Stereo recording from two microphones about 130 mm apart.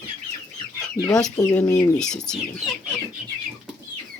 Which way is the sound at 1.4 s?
20° left (ahead or behind).